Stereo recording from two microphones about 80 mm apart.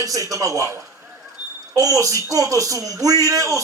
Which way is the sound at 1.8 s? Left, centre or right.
Right.